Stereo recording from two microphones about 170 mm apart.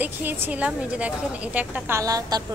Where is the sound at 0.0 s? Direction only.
10° right (ahead or behind).